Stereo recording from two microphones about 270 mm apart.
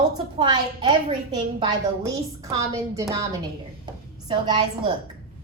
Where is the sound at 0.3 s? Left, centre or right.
Centre.